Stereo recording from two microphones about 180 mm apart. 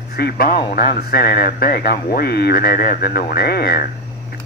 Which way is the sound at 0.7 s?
50° left (ahead or behind).